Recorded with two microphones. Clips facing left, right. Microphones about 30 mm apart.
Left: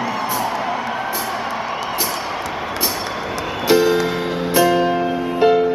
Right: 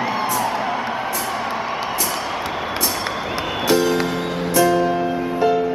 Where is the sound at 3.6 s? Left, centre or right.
Centre.